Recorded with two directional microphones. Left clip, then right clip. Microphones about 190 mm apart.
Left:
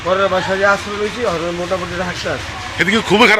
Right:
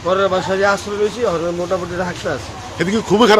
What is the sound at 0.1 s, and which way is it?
Speech, 25° right (ahead or behind).